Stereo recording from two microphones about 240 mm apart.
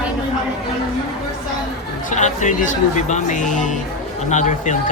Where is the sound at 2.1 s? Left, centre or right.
Left.